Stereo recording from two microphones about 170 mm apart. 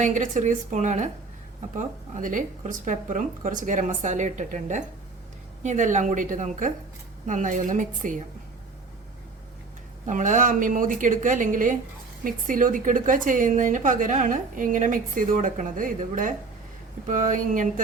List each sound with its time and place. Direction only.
0.0 s a woman's voice: 45° right (ahead or behind)
10.1 s a woman's voice: 50° right (ahead or behind)